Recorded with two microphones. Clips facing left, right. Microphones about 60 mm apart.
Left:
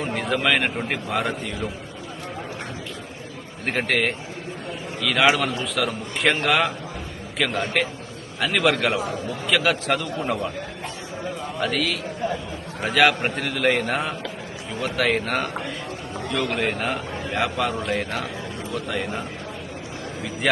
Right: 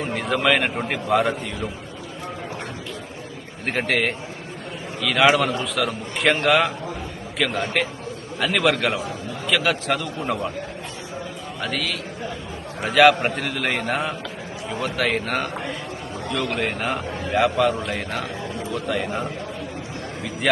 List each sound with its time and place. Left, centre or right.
0.0 s a man's voice: centre
3.7 s a man's voice: centre
11.6 s a man's voice: centre
16.5 s a man's voice: centre
17.1 s a sound: right
17.3 s a man's voice: centre